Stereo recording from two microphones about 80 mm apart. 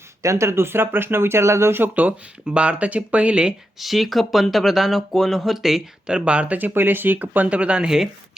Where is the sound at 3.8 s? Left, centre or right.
Centre.